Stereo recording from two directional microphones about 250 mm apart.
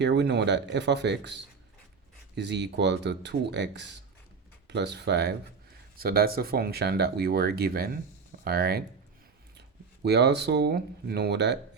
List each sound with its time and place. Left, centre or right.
0.0 s speech: right